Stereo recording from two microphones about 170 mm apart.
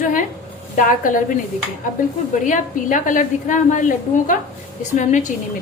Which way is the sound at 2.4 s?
50° left (ahead or behind).